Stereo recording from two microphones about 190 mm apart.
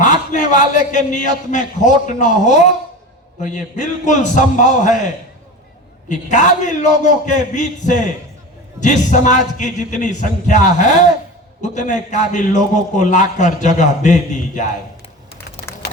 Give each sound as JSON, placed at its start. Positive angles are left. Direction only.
{"t": 0.0, "sound": "a man's voice", "side_deg": 40}
{"t": 6.1, "sound": "a man's voice", "side_deg": 40}